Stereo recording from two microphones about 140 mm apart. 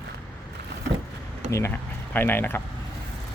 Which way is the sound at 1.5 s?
20° left (ahead or behind).